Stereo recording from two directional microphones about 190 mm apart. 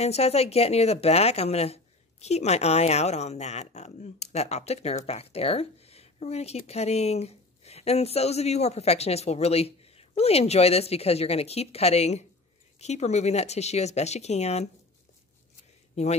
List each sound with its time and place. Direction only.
0.0 s a woman's voice: 35° left (ahead or behind)
15.9 s speech: 35° left (ahead or behind)